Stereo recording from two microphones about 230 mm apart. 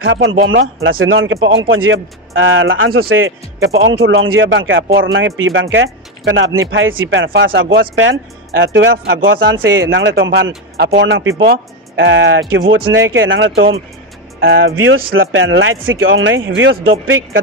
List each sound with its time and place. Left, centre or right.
0.0 s speech: right
15.1 s speech: right